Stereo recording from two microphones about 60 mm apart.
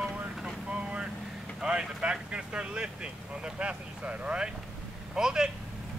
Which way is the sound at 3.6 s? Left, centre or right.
Right.